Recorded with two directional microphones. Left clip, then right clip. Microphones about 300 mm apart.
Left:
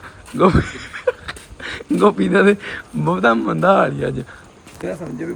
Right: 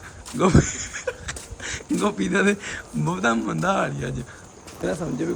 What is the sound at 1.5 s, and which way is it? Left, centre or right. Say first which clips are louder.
Speech: left 7 dB; centre.